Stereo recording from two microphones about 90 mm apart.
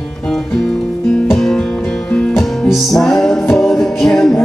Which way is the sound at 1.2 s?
5° left (ahead or behind).